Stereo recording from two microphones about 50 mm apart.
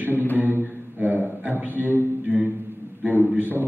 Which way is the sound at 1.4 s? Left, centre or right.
Right.